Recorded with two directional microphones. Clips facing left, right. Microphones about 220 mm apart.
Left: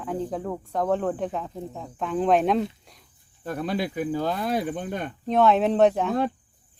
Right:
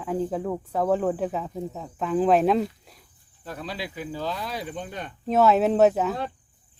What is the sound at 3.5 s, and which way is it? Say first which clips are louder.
Cricket: left 7 dB; 50° left (ahead or behind).